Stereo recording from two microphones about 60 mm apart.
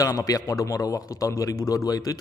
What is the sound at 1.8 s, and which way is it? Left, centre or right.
Speech, left.